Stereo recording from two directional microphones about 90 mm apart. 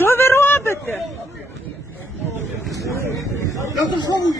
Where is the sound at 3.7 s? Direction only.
50° left (ahead or behind).